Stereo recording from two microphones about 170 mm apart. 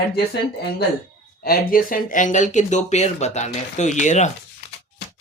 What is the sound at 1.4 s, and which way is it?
Speech, 60° left (ahead or behind).